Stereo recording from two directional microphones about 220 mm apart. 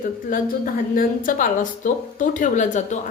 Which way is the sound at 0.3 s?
40° left (ahead or behind).